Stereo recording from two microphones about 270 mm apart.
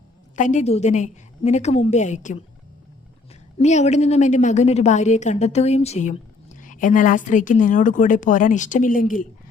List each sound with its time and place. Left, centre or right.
0.3 s a woman's voice: left
3.6 s a woman's voice: left